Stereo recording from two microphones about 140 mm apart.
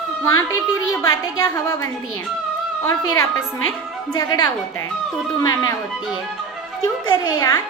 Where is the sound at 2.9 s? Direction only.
20° left (ahead or behind).